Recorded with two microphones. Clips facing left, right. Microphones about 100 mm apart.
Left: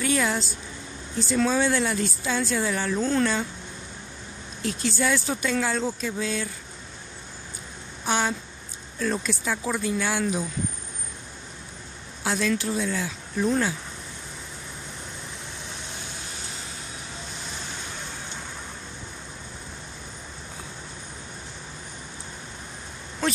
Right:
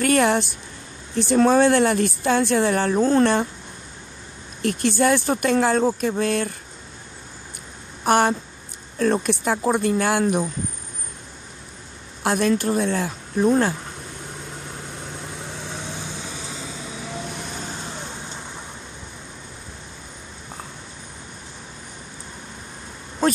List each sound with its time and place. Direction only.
0.0 s a woman's voice: 60° right (ahead or behind); by 3.3 s 40° right (ahead or behind)
4.6 s a woman's voice: 55° right (ahead or behind)
8.0 s speech: 55° right (ahead or behind)
12.2 s speech: 50° right (ahead or behind)
23.2 s a sound: 40° right (ahead or behind)